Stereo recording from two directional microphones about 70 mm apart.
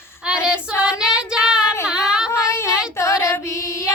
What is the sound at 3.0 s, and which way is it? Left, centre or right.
Child singing, left.